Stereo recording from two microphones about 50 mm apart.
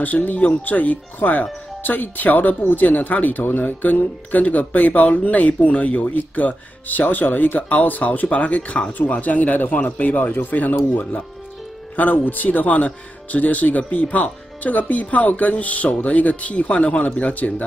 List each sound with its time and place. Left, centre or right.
0.0 s speech: left